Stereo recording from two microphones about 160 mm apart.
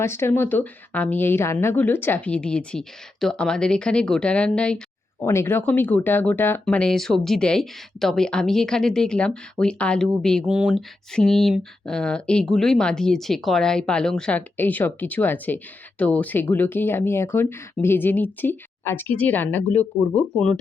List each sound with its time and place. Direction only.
0.0 s a woman's voice: 15° left (ahead or behind)